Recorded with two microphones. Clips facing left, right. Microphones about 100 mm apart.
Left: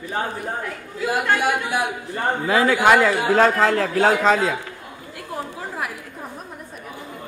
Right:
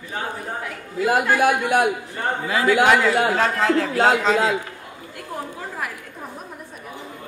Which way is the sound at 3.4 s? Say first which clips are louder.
Left 3 dB; 50° left (ahead or behind).